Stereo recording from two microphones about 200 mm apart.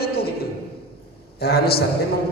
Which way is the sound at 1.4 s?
50° left (ahead or behind).